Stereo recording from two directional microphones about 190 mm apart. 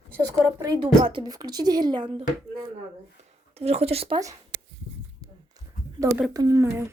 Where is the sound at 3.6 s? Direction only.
35° right (ahead or behind).